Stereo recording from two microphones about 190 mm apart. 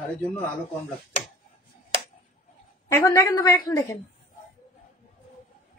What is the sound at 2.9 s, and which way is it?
Speech, 15° left (ahead or behind).